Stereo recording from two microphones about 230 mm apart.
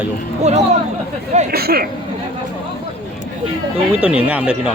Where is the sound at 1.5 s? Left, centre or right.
Right.